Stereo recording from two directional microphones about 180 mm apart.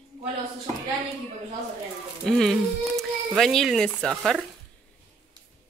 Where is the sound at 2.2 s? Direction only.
Centre (ahead or behind).